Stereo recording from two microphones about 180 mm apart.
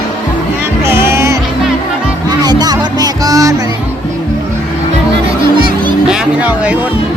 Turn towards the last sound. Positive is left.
turn(degrees=-10)  # may be behind; listen again after turning